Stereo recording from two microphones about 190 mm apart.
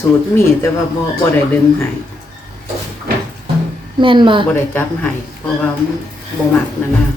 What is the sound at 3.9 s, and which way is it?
Speech, 25° right (ahead or behind).